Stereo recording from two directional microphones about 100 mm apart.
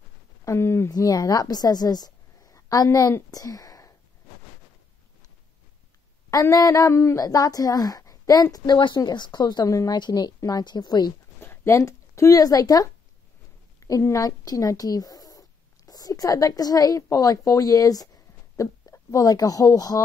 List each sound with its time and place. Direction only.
0.5 s a woman's voice: 25° left (ahead or behind)
6.5 s a woman's voice: 35° left (ahead or behind)
8.7 s speech: 50° left (ahead or behind)
9.9 s speech: 45° left (ahead or behind)
11.4 s speech: 25° left (ahead or behind)